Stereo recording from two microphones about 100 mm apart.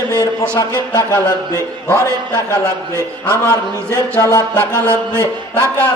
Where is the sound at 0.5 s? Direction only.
30° left (ahead or behind).